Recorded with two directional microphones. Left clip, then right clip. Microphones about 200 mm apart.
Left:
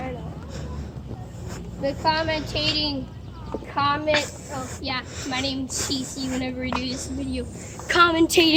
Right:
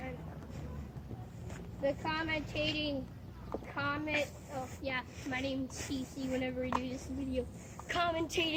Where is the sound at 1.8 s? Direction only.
40° left (ahead or behind).